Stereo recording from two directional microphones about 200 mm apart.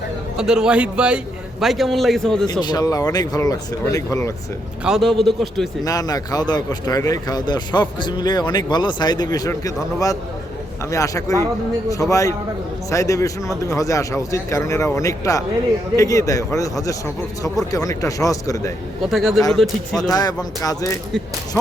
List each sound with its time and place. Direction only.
0.3 s a man's voice: 5° right (ahead or behind)
2.5 s speech: 20° left (ahead or behind)
4.8 s a man's voice: centre (ahead or behind)
5.8 s speech: 20° left (ahead or behind)
10.9 s speech: 15° left (ahead or behind)
17.7 s speech: 15° left (ahead or behind)
19.0 s a man's voice: centre (ahead or behind)
20.0 s speech: 20° left (ahead or behind)